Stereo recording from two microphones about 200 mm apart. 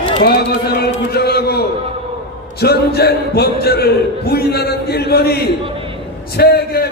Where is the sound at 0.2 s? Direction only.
50° left (ahead or behind).